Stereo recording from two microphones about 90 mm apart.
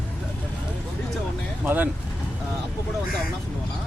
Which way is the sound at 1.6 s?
20° right (ahead or behind).